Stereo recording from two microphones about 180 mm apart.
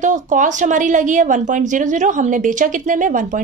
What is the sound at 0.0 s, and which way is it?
A woman's voice, 45° right (ahead or behind).